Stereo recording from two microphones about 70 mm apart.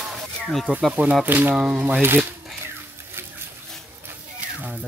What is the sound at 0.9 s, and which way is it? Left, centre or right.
Speech, centre.